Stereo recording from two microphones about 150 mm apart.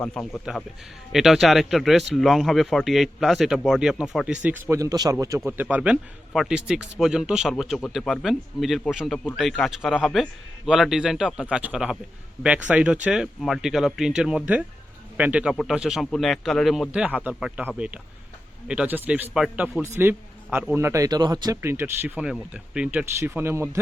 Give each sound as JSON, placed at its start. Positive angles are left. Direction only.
{"t": 0.0, "sound": "speech", "side_deg": 5}
{"t": 5.5, "sound": "speech", "side_deg": -10}
{"t": 19.8, "sound": "speech", "side_deg": -15}